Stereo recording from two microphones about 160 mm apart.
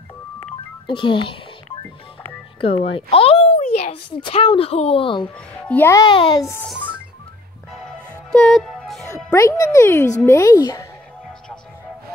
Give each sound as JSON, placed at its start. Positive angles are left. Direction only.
{"t": 0.8, "sound": "a child's voice", "side_deg": 30}
{"t": 2.6, "sound": "a child's voice", "side_deg": 35}
{"t": 5.7, "sound": "a child's voice", "side_deg": 15}
{"t": 6.0, "sound": "a child's voice", "side_deg": 30}
{"t": 8.3, "sound": "music", "side_deg": 5}
{"t": 9.3, "sound": "a child's voice", "side_deg": 20}